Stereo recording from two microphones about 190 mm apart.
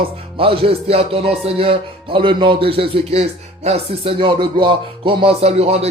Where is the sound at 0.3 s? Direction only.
30° right (ahead or behind).